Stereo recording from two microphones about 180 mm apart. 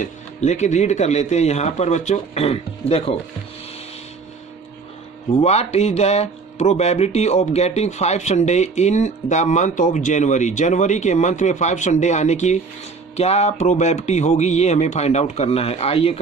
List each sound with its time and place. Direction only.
0.0 s speech: 40° left (ahead or behind)
5.4 s speech: 35° left (ahead or behind)